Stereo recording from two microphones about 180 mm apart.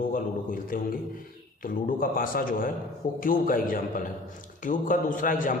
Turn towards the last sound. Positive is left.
turn(degrees=50)  # may be behind; listen again after turning